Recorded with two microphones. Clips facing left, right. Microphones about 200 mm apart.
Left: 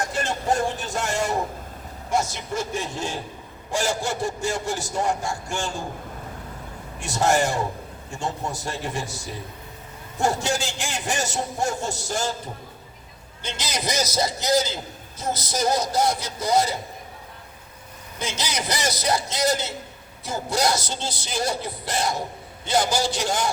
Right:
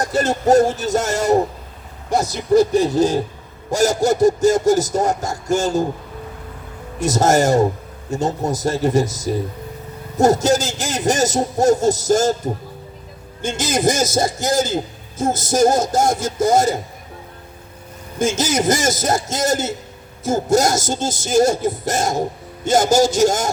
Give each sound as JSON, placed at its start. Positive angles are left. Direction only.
{"t": 0.0, "sound": "a man's voice", "side_deg": -40}
{"t": 7.0, "sound": "a man's voice", "side_deg": -40}
{"t": 13.4, "sound": "speech", "side_deg": -50}
{"t": 18.2, "sound": "speech", "side_deg": -45}